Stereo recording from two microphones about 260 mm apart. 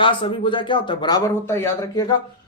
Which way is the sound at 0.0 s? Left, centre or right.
Centre.